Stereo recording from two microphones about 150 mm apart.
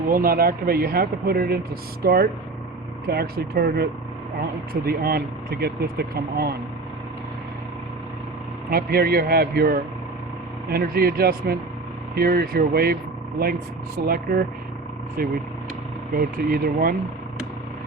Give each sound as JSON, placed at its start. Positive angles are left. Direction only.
{"t": 0.1, "sound": "speech", "side_deg": -75}
{"t": 8.7, "sound": "speech", "side_deg": -90}
{"t": 13.4, "sound": "speech", "side_deg": -80}